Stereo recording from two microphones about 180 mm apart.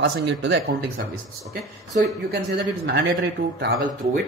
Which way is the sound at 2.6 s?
80° right.